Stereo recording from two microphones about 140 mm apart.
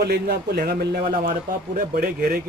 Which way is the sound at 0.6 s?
90° right.